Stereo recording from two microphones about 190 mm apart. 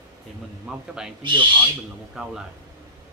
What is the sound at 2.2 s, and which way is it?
Speech, 5° right (ahead or behind).